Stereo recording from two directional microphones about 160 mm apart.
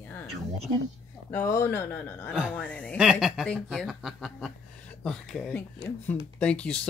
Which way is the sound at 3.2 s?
Centre (ahead or behind).